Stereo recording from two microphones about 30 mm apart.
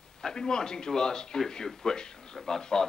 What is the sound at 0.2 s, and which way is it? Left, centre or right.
A man's voice, left.